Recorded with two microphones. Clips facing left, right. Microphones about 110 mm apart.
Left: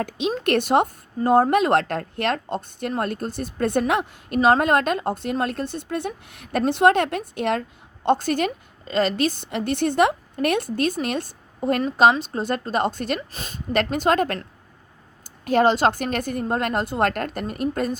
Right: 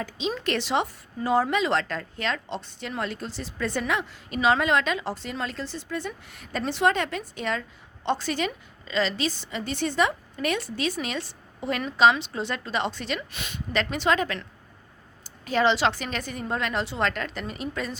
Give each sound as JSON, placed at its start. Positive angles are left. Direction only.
{"t": 0.0, "sound": "a woman's voice", "side_deg": 55}